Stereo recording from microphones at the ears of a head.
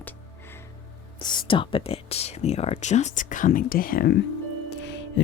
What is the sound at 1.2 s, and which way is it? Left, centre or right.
Speech, left.